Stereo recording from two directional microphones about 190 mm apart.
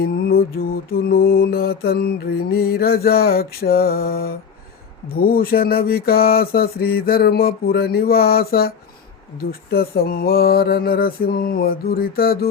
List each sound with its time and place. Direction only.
0.0 s mantra: 50° left (ahead or behind)